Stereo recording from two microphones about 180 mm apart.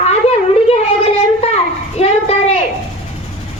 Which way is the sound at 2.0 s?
35° left (ahead or behind).